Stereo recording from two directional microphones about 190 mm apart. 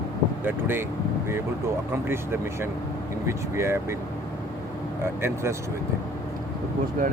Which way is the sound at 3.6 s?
15° right (ahead or behind).